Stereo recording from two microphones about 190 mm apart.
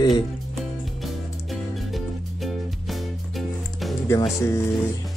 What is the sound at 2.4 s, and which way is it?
Music, centre (ahead or behind).